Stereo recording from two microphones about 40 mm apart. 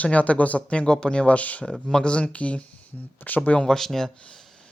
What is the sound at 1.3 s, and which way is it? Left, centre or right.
Speech, left.